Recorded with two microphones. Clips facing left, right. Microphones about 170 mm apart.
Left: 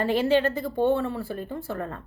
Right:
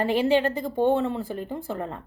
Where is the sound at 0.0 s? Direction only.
15° right (ahead or behind).